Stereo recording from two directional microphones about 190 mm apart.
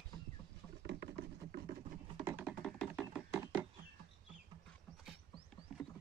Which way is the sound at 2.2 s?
10° right (ahead or behind).